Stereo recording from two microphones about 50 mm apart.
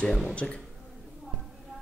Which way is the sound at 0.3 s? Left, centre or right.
Left.